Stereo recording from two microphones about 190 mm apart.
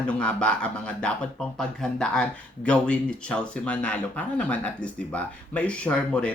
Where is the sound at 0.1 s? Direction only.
5° left (ahead or behind).